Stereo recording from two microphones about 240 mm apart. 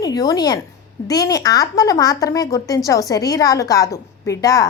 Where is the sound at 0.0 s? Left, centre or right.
Centre.